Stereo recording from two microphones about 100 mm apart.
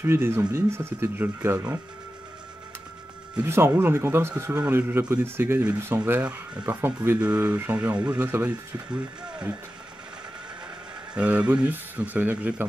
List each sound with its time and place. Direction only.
0.0 s speech: 25° right (ahead or behind)
3.4 s speech: 25° right (ahead or behind)
11.1 s speech: 15° right (ahead or behind)